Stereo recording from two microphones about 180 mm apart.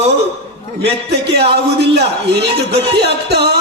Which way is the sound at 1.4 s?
65° right (ahead or behind).